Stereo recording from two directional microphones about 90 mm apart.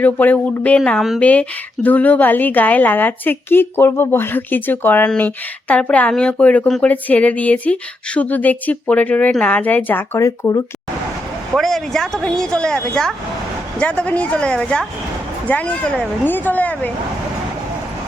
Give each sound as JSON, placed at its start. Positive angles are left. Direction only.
{"t": 0.0, "sound": "a woman's voice", "side_deg": 20}
{"t": 0.9, "sound": "speech", "side_deg": -5}
{"t": 1.2, "sound": "a woman's voice", "side_deg": 15}
{"t": 10.2, "sound": "speech", "side_deg": 35}
{"t": 11.5, "sound": "speech", "side_deg": 5}